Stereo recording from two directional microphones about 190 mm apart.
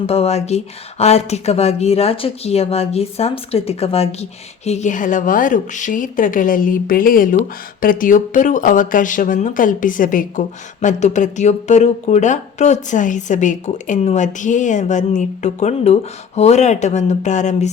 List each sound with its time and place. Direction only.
0.0 s speech: 30° left (ahead or behind)